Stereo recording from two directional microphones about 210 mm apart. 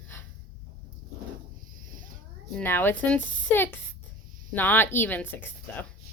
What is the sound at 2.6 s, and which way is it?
A woman's voice, 10° left (ahead or behind).